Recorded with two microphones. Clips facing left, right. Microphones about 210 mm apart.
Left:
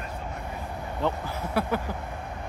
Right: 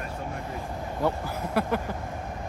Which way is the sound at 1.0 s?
10° right (ahead or behind).